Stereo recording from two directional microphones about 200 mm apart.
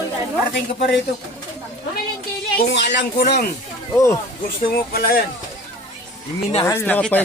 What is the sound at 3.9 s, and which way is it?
Speech, 15° left (ahead or behind).